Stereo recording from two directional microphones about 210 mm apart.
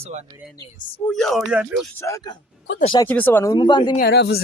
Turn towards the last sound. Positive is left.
turn(degrees=50)  # may be behind; listen again after turning